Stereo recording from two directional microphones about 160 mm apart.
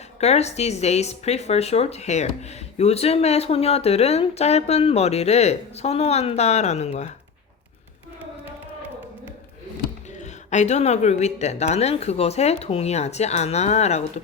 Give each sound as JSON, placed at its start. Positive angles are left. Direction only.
{"t": 0.2, "sound": "speech", "side_deg": 45}
{"t": 10.2, "sound": "speech", "side_deg": 45}